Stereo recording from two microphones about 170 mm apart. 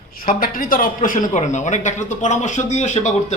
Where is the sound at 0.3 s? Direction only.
55° left (ahead or behind).